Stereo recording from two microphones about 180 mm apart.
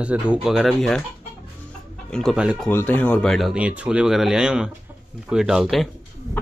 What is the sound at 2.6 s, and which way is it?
Speech, 10° left (ahead or behind).